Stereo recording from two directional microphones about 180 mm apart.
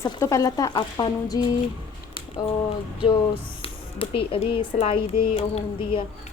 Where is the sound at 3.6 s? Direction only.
30° left (ahead or behind).